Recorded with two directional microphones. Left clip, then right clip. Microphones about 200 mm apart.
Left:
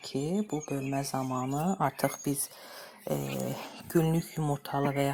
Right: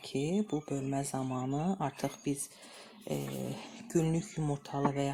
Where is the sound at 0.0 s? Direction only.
15° left (ahead or behind).